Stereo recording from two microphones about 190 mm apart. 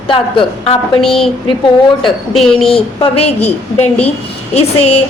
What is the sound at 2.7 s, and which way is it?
A woman's voice, 30° left (ahead or behind).